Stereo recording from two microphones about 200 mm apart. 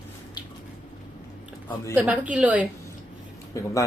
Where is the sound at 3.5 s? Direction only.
15° left (ahead or behind).